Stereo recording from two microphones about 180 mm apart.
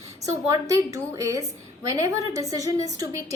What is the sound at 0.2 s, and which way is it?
A woman's voice, 15° right (ahead or behind).